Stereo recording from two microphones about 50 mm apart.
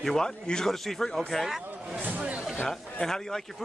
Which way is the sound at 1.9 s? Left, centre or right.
Right.